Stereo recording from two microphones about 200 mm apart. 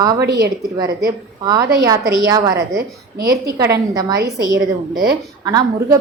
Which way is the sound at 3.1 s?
50° right (ahead or behind).